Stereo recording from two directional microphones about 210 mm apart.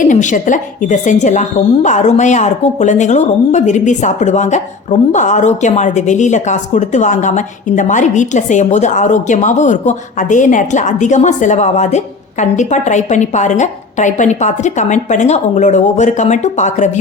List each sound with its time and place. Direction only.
0.0 s a woman's voice: 35° left (ahead or behind)